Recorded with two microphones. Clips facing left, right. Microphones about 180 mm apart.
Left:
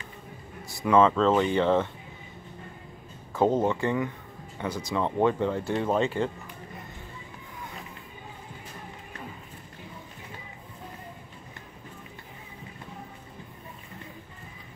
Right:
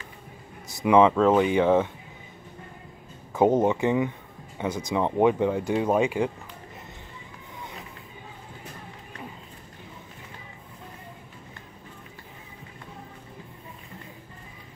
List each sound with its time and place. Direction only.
0.7 s speech: 15° right (ahead or behind)
3.3 s speech: 15° right (ahead or behind)